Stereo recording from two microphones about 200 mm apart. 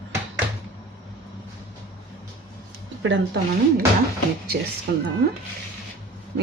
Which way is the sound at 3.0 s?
65° right (ahead or behind).